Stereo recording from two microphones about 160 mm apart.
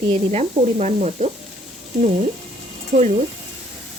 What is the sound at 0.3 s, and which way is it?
Speech, 45° right (ahead or behind).